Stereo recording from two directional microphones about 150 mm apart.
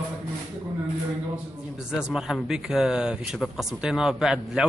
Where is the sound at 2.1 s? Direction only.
5° right (ahead or behind).